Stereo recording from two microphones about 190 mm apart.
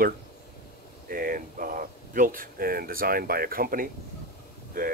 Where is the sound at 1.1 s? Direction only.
45° right (ahead or behind).